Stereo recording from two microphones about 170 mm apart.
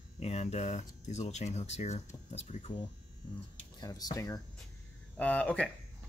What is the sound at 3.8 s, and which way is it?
Speech, 25° left (ahead or behind).